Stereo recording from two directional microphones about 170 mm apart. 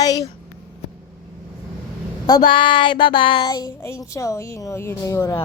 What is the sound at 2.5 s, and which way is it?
Speech, 30° left (ahead or behind).